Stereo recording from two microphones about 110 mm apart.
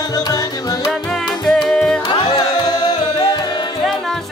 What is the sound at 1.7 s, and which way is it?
Music, 5° left (ahead or behind).